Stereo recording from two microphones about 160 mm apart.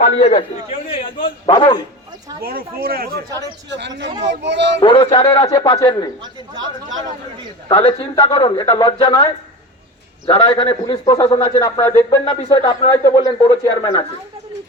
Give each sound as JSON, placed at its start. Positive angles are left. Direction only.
{"t": 0.0, "sound": "a man's voice", "side_deg": 40}
{"t": 1.2, "sound": "a man's voice", "side_deg": 30}
{"t": 2.4, "sound": "speech", "side_deg": -70}
{"t": 3.7, "sound": "speech", "side_deg": -90}
{"t": 4.8, "sound": "a man's voice", "side_deg": 35}
{"t": 7.7, "sound": "a man's voice", "side_deg": 35}